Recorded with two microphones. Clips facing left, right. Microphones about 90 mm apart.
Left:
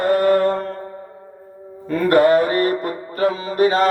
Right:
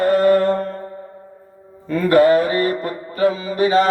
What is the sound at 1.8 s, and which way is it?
Mantra, 55° left (ahead or behind).